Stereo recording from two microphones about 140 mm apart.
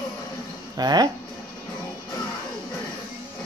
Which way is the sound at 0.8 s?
30° right (ahead or behind).